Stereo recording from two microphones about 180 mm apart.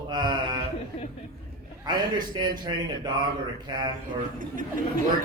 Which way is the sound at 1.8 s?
20° right (ahead or behind).